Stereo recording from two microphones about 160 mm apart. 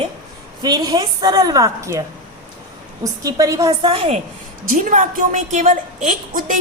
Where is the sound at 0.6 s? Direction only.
25° right (ahead or behind).